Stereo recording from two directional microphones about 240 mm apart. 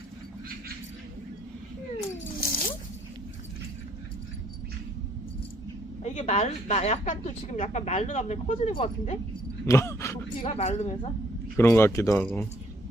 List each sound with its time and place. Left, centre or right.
2.4 s zipper: left
6.0 s a woman's voice: left
9.6 s speech: centre
10.4 s a woman's voice: left
11.5 s speech: centre